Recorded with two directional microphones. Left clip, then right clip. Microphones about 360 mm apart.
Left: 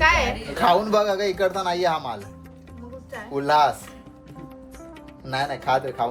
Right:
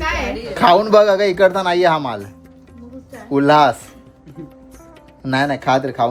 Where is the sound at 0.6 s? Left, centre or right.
Right.